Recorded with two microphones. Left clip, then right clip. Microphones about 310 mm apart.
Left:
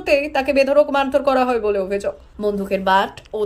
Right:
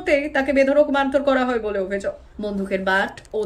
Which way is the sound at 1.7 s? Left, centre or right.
Left.